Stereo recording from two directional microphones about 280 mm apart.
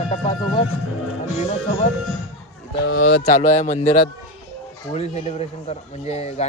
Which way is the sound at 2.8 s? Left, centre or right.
Left.